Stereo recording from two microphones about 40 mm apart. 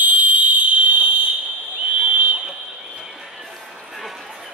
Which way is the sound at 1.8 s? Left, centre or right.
Right.